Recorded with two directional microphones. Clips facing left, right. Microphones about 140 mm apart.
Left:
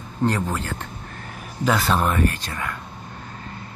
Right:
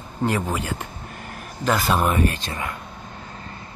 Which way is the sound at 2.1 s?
20° right (ahead or behind).